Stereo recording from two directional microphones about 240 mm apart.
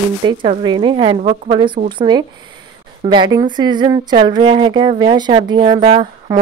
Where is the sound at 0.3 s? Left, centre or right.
Centre.